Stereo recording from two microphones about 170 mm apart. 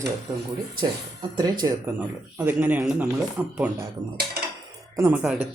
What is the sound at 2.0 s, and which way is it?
A man's voice, 10° right (ahead or behind).